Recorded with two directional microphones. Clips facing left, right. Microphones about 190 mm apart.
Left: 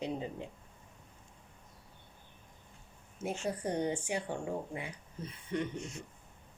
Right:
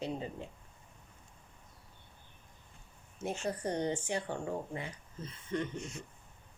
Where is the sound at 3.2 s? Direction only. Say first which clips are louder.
Even; 10° left (ahead or behind).